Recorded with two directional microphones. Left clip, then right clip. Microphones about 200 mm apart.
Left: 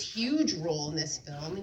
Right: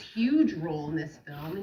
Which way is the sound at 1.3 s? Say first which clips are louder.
Even; 50° left (ahead or behind).